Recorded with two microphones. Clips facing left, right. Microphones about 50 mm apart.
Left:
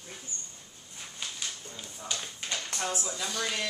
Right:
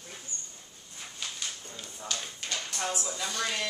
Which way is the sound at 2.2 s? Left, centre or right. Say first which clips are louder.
Even; centre.